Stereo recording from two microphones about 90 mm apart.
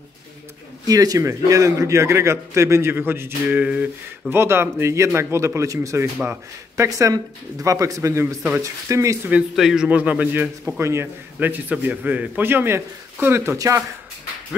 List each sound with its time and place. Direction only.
0.8 s a man's voice: 40° right (ahead or behind); by 3.9 s 15° right (ahead or behind)
4.3 s a man's voice: 25° right (ahead or behind)
9.6 s a man's voice: 5° right (ahead or behind)
9.8 s a man's voice: 15° right (ahead or behind)
10.8 s a man's voice: 30° right (ahead or behind)
11.3 s a man's voice: 20° right (ahead or behind); by 13.8 s 35° right (ahead or behind)